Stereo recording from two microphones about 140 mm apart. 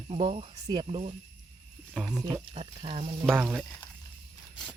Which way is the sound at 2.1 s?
25° right (ahead or behind).